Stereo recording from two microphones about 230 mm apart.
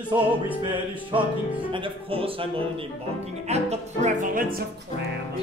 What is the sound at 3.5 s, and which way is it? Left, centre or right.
Speech, right.